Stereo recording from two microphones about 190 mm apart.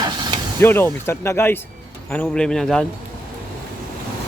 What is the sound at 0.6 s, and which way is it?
Speech, 10° left (ahead or behind).